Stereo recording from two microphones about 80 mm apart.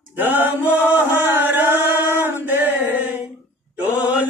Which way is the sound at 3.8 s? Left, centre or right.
Centre.